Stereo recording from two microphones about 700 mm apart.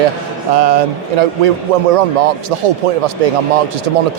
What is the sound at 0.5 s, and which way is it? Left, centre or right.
Speech, right.